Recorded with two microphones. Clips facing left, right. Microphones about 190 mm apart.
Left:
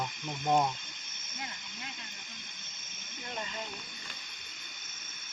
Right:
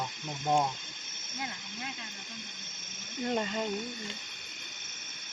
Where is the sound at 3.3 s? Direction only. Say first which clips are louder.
Right 8 dB; 40° right (ahead or behind).